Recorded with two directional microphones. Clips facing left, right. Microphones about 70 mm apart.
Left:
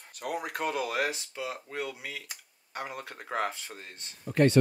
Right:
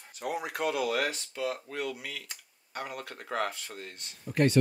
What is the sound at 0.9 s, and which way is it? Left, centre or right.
Speech, centre.